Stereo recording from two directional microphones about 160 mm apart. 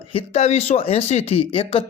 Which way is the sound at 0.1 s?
40° left (ahead or behind).